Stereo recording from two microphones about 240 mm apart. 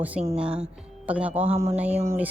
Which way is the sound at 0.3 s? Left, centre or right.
Centre.